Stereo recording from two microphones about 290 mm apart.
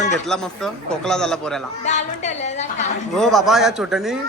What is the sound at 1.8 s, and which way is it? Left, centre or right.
A woman's voice, left.